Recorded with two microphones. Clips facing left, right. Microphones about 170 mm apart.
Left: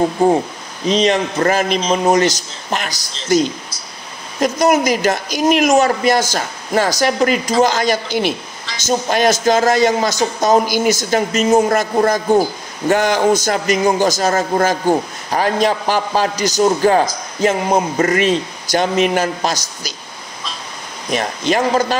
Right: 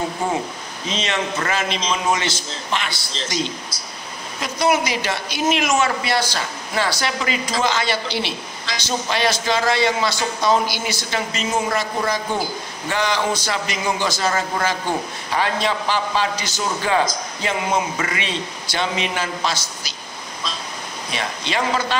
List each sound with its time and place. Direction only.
0.2 s a man's voice: 35° left (ahead or behind)
21.1 s speech: 45° left (ahead or behind)